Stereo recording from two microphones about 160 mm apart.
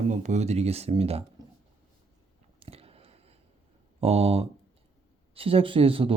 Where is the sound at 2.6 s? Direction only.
40° right (ahead or behind).